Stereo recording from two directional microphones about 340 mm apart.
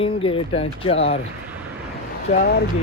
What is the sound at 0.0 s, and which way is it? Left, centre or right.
Speech, centre.